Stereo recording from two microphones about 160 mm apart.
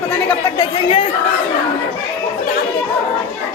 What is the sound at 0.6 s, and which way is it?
Speech, 30° left (ahead or behind).